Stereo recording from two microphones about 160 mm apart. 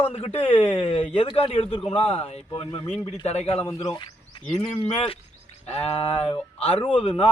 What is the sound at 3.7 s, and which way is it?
A man's voice, 25° left (ahead or behind).